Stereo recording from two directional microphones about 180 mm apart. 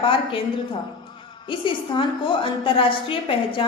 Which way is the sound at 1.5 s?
30° left (ahead or behind).